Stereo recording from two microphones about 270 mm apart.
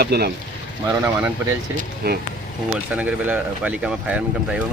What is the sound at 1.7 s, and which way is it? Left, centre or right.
Speech, right.